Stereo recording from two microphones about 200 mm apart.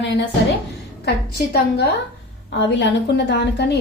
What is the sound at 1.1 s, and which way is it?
A woman's voice, 55° left (ahead or behind).